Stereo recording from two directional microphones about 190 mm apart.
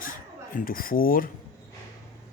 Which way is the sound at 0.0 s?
45° left (ahead or behind).